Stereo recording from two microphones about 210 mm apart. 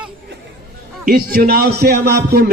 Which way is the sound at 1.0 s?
45° right (ahead or behind).